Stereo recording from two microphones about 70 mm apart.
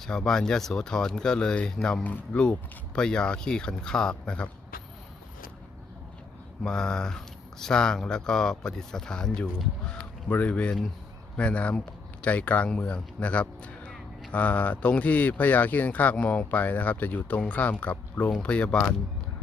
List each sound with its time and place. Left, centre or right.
0.0 s speech: centre
6.6 s speech: centre
10.2 s speech: left